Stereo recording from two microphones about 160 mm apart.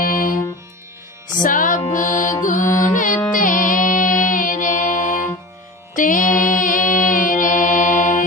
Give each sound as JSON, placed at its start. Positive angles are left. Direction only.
{"t": 0.0, "sound": "music", "side_deg": 60}
{"t": 5.9, "sound": "mantra", "side_deg": 55}